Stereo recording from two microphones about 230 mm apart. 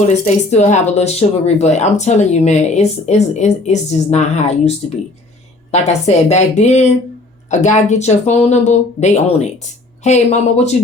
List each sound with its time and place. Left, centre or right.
0.1 s speech: left
5.7 s speech: left